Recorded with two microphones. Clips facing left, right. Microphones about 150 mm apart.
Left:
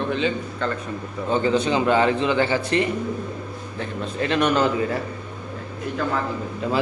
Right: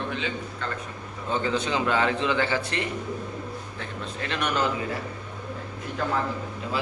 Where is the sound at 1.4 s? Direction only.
Centre (ahead or behind).